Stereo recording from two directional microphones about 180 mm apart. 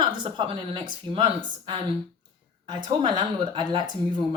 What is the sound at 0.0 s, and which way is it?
Speech, 25° right (ahead or behind).